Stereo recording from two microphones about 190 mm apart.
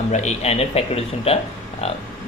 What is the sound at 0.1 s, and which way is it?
Speech, 35° left (ahead or behind).